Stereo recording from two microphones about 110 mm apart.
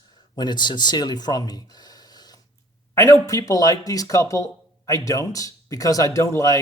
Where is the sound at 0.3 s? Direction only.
40° left (ahead or behind).